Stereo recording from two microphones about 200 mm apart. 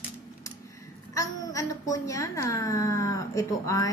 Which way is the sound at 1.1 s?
15° left (ahead or behind).